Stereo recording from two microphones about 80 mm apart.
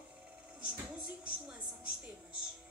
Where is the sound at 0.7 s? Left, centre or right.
Centre.